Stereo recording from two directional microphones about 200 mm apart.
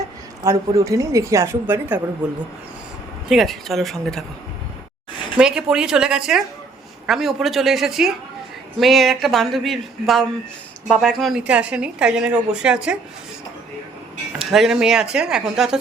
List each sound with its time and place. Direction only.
0.4 s a woman's voice: 15° right (ahead or behind)
3.2 s a woman's voice: centre (ahead or behind)
5.4 s a woman's voice: 5° right (ahead or behind)
14.3 s a woman's voice: centre (ahead or behind)